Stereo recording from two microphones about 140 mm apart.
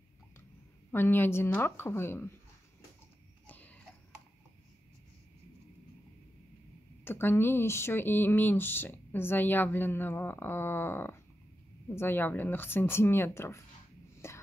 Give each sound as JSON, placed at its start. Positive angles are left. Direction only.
{"t": 0.9, "sound": "speech", "side_deg": 15}
{"t": 3.4, "sound": "a sound", "side_deg": 10}
{"t": 7.1, "sound": "speech", "side_deg": 15}
{"t": 14.2, "sound": "whispering", "side_deg": 20}